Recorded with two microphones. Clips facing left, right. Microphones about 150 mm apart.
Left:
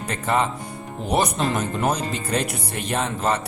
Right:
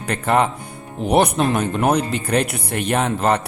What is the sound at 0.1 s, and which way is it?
A man's voice, 60° right (ahead or behind).